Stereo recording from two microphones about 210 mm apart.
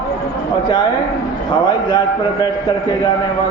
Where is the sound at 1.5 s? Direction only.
20° left (ahead or behind).